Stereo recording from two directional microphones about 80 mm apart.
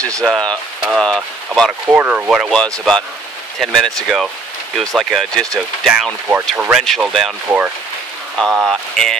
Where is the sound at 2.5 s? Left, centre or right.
Centre.